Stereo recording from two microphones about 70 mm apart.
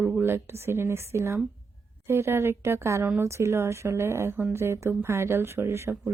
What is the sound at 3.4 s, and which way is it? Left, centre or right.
Speech, right.